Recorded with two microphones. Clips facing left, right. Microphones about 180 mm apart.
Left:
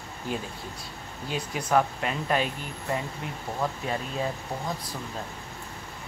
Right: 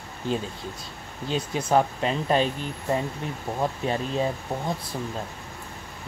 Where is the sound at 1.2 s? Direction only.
25° right (ahead or behind).